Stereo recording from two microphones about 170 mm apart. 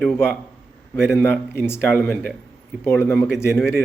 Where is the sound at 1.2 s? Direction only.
10° left (ahead or behind).